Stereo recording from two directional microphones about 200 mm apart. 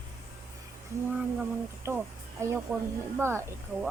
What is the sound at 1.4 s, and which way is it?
Speech, 10° right (ahead or behind).